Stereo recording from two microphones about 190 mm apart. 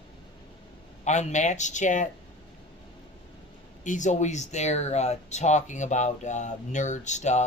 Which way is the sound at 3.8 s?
40° left (ahead or behind).